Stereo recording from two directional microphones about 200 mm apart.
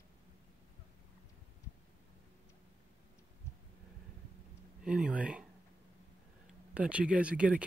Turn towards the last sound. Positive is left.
turn(degrees=-5)  # may be behind; listen again after turning